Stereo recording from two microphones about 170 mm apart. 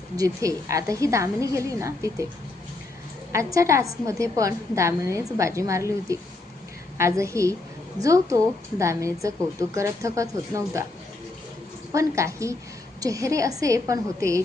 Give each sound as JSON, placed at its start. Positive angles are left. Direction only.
{"t": 0.2, "sound": "a woman's voice", "side_deg": -20}
{"t": 3.3, "sound": "a woman's voice", "side_deg": -20}
{"t": 11.9, "sound": "a woman's voice", "side_deg": -15}